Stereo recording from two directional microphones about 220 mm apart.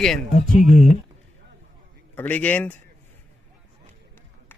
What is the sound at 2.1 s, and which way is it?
Speech, 5° left (ahead or behind).